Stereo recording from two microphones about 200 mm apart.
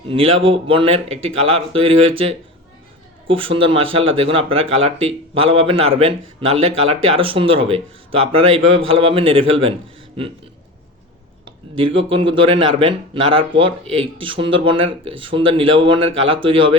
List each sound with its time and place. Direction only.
0.1 s speech: 30° right (ahead or behind)
11.8 s speech: 25° right (ahead or behind)